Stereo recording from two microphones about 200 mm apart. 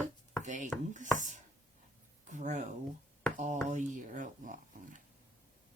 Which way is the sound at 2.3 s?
40° right (ahead or behind).